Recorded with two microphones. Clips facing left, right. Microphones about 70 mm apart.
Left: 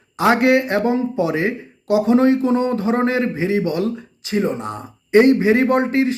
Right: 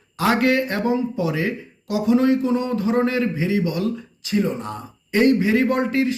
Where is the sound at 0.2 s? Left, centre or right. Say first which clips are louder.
Left 4 dB; left.